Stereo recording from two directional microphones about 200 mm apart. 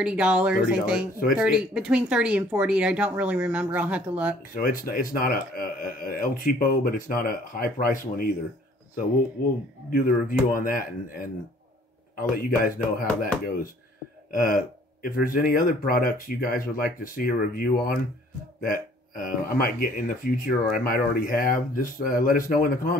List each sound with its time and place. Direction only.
0.0 s speech: 5° right (ahead or behind)
4.6 s speech: 45° left (ahead or behind)
9.8 s speech: 45° left (ahead or behind)
14.3 s speech: 45° left (ahead or behind)